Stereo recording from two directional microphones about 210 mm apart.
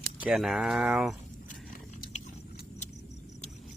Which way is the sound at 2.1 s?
35° left (ahead or behind).